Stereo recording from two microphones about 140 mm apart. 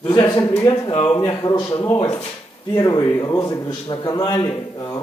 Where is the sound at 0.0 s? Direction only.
30° left (ahead or behind).